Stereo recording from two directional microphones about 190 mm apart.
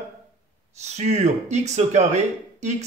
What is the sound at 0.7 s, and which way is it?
Speech, 35° right (ahead or behind).